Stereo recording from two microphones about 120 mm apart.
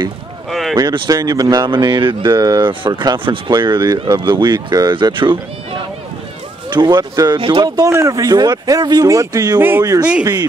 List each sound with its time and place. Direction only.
0.5 s a sound: centre (ahead or behind)
1.0 s speech: 30° right (ahead or behind)
6.7 s speech: 35° right (ahead or behind)
9.6 s speech: 20° right (ahead or behind)